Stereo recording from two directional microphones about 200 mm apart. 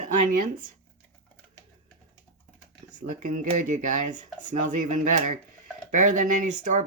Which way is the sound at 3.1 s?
40° right (ahead or behind).